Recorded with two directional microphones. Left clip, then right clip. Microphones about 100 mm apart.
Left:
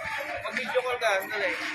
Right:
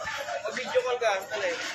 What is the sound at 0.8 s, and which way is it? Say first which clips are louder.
Speech: left 1 dB; centre (ahead or behind).